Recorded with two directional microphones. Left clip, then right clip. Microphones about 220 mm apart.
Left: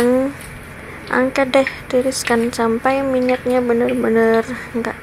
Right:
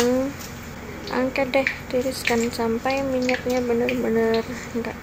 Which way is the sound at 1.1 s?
15° left (ahead or behind).